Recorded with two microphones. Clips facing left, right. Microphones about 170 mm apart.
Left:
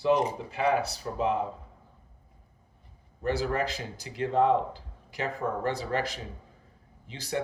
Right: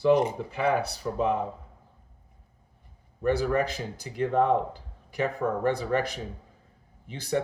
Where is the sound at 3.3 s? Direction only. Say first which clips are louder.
Right 3 dB; 55° right (ahead or behind).